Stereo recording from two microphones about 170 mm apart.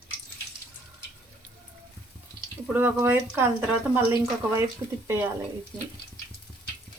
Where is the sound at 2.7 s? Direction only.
10° right (ahead or behind).